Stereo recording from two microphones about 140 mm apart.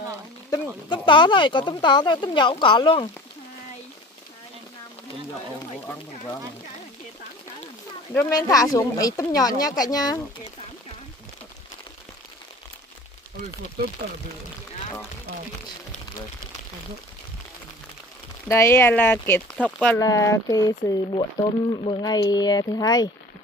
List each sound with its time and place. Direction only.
0.8 s speech: 35° left (ahead or behind)
8.5 s speech: 25° left (ahead or behind)
18.5 s speech: 15° left (ahead or behind)
20.0 s speech: 25° left (ahead or behind)
21.1 s speech: 40° left (ahead or behind)